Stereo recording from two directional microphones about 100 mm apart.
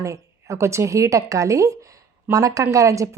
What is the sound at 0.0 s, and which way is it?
A woman's voice, 30° right (ahead or behind).